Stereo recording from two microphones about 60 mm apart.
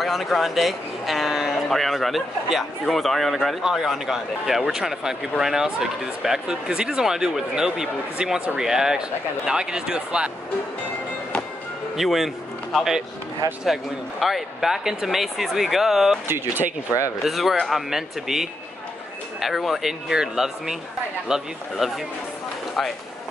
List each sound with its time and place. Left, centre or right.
0.0 s speech: centre
3.6 s speech: centre
12.0 s speech: centre
13.4 s speech: right
14.2 s speech: centre
16.3 s speech: right
17.2 s speech: centre